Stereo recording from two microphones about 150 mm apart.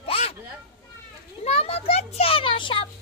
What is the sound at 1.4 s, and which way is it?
A child's voice, 45° left (ahead or behind).